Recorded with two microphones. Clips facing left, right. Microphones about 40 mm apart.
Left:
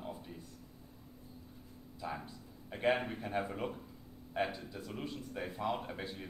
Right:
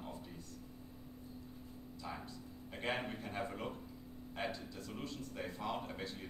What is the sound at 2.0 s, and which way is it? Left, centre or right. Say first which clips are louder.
A man's voice: left 5 dB; centre.